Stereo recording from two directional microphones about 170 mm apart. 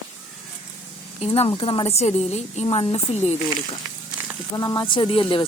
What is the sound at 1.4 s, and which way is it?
A woman's voice, 35° left (ahead or behind).